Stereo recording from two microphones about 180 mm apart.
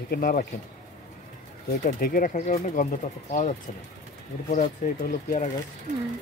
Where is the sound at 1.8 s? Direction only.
55° left (ahead or behind).